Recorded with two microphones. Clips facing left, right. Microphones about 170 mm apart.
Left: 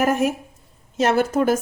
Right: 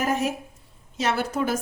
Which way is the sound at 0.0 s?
50° left (ahead or behind).